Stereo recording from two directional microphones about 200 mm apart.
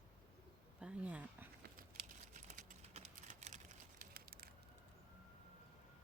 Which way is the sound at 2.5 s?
35° right (ahead or behind).